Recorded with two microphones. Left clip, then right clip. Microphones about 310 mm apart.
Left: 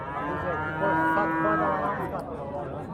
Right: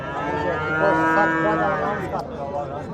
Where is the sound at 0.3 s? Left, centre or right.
Right.